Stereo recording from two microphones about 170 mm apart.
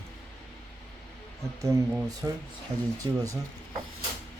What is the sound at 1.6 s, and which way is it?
Speech, 20° right (ahead or behind).